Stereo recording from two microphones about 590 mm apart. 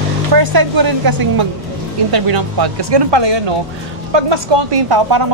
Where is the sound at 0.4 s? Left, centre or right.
Right.